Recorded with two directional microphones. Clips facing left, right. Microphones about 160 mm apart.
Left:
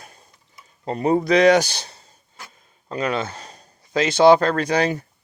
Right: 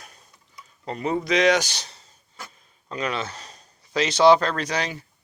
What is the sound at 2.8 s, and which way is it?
Speech, 30° left (ahead or behind).